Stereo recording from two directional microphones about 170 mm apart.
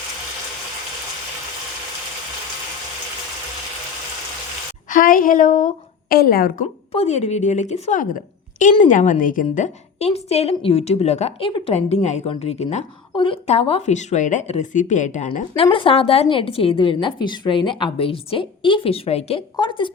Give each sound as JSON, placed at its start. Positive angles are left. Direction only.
{"t": 4.9, "sound": "a woman's voice", "side_deg": 55}
{"t": 6.9, "sound": "a woman's voice", "side_deg": 40}
{"t": 15.5, "sound": "a woman's voice", "side_deg": 30}